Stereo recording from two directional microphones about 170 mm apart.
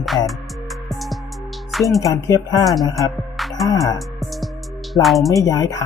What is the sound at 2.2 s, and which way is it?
Speech, 20° left (ahead or behind).